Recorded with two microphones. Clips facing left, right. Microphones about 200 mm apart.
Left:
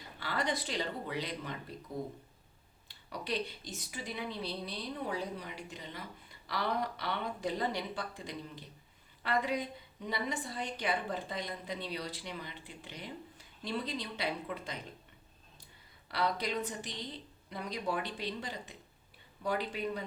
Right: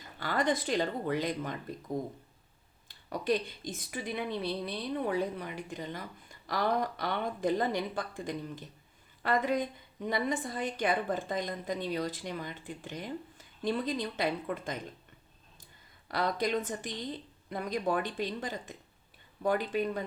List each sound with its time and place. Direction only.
0.2 s a woman's voice: 50° right (ahead or behind)
2.9 s a woman's voice: 50° right (ahead or behind)
16.0 s a woman's voice: 45° right (ahead or behind)